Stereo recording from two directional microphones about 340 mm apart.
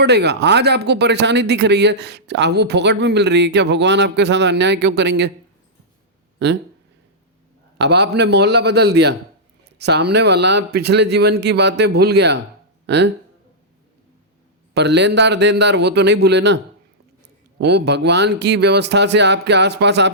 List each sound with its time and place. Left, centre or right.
0.0 s speech: right
6.4 s a man's voice: right
7.8 s speech: right
12.8 s a sound: right
14.7 s a man's voice: right
17.6 s speech: right